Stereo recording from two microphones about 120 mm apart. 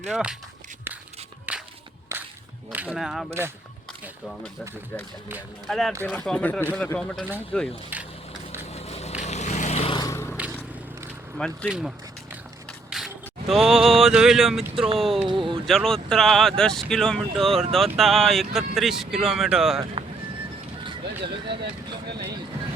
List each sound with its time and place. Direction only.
0.1 s speech: 5° right (ahead or behind)
1.5 s walk: 15° right (ahead or behind)
2.7 s speech: 10° right (ahead or behind)
5.6 s speech: 5° left (ahead or behind)
8.7 s a sound: 60° left (ahead or behind)
9.2 s vehicle: 70° left (ahead or behind)
9.9 s scrape: 35° left (ahead or behind)
10.4 s vehicle: 10° right (ahead or behind)
11.3 s speech: 5° left (ahead or behind)
11.7 s a sound: 5° right (ahead or behind)
12.9 s single-lens reflex camera: 5° right (ahead or behind)
13.5 s speech: centre (ahead or behind)
20.8 s speech: 45° right (ahead or behind)